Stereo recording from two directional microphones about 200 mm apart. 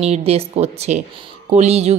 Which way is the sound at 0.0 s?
30° right (ahead or behind).